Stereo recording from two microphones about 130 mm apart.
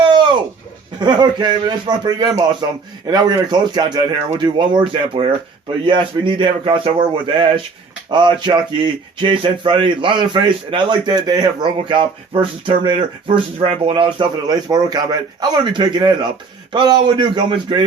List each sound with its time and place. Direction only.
0.0 s a sound: 35° right (ahead or behind)
0.9 s speech: 35° right (ahead or behind)
13.9 s speech: 35° right (ahead or behind)